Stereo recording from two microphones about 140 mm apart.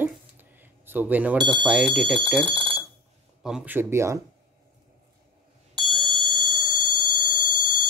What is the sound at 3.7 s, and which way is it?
Speech, 20° right (ahead or behind).